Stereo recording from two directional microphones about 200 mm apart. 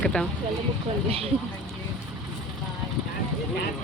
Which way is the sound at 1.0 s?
30° right (ahead or behind).